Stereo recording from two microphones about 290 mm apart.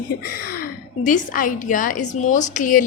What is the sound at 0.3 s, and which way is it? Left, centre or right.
A woman's voice, left.